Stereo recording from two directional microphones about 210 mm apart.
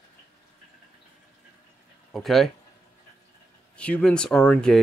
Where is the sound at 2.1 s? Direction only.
Centre (ahead or behind).